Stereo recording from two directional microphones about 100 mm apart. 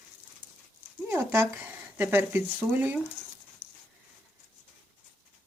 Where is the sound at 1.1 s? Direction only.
20° right (ahead or behind).